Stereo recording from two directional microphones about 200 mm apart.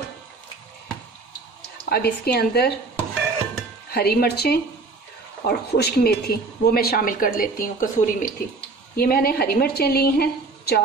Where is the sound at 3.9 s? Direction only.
55° left (ahead or behind).